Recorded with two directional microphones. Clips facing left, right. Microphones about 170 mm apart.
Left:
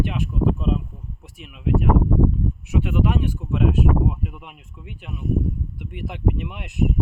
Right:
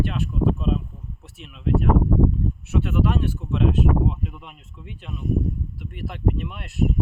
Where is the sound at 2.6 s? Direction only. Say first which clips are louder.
Left 1 dB; 15° left (ahead or behind).